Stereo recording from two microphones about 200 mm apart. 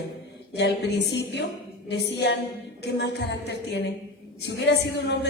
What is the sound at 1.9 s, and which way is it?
A woman's voice, 60° left (ahead or behind).